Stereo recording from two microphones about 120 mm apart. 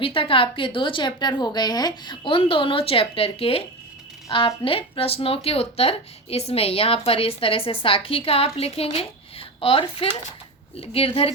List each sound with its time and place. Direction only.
0.0 s speech: 45° left (ahead or behind)